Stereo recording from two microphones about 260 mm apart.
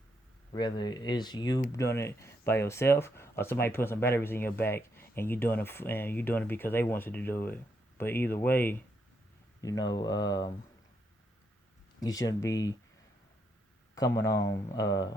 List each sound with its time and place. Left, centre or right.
0.5 s speech: centre
11.9 s speech: centre
13.9 s speech: centre